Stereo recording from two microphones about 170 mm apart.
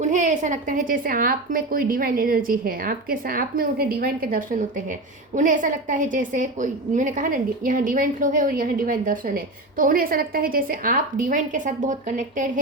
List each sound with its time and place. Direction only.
0.0 s a woman's voice: 45° right (ahead or behind)